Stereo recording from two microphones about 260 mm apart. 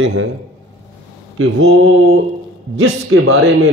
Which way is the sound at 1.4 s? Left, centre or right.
Right.